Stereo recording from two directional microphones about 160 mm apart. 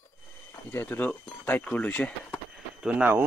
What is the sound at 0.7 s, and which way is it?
Speech, 15° left (ahead or behind).